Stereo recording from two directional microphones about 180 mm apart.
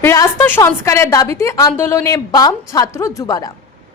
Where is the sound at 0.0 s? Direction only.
15° left (ahead or behind).